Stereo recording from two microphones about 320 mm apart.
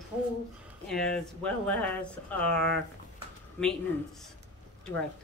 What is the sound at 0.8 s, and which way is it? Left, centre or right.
A man's voice, centre.